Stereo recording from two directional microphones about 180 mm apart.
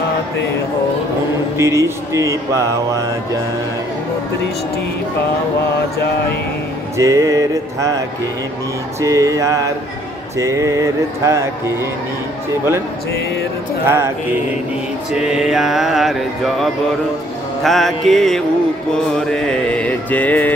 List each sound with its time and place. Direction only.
1.6 s mantra: 15° right (ahead or behind)
7.0 s music: 20° right (ahead or behind)
9.0 s mantra: 20° right (ahead or behind)
13.8 s mantra: 15° right (ahead or behind)
15.1 s mantra: 5° right (ahead or behind)
17.6 s mantra: centre (ahead or behind)